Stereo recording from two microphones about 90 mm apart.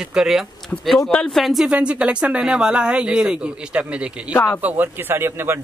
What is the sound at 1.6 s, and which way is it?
Speech, 15° right (ahead or behind).